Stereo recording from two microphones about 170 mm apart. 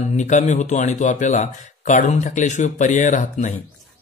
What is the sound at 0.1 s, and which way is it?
A man's voice, 45° left (ahead or behind).